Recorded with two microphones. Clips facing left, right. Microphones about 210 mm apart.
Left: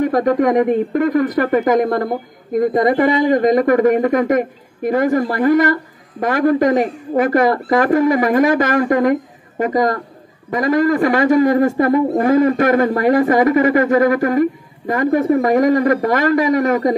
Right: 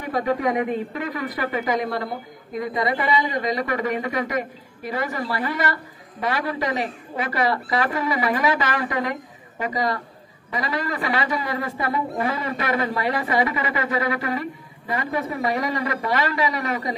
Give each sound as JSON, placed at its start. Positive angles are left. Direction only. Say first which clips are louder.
{"t": 0.0, "sound": "a man's voice", "louder": "left 9 dB", "side_deg": 45}